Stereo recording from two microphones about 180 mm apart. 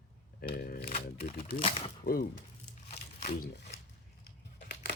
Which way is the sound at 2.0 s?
55° left (ahead or behind).